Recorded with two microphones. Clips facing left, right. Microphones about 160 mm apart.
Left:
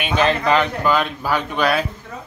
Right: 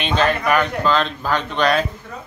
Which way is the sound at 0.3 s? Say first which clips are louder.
Left 1 dB; 25° left (ahead or behind).